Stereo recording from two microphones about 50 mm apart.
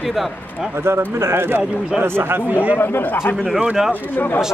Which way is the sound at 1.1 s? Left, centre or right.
Right.